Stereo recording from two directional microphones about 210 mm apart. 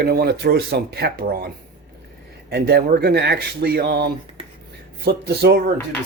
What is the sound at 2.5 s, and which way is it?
Speech, 50° right (ahead or behind).